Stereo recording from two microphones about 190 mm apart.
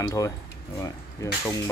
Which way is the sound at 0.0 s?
15° left (ahead or behind).